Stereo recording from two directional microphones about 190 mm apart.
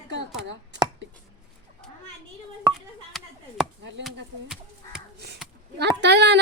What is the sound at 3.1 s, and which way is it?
Chop, centre (ahead or behind).